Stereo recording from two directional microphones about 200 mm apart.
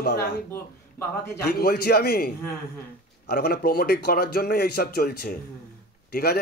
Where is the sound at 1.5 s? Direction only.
50° left (ahead or behind).